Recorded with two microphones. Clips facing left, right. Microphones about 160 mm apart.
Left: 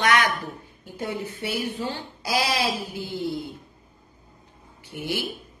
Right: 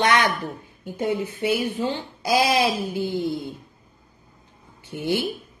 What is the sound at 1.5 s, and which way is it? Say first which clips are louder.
A woman's voice: right 4 dB; 20° right (ahead or behind).